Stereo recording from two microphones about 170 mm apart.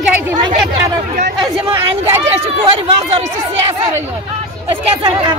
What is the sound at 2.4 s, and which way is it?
Speech, 35° right (ahead or behind).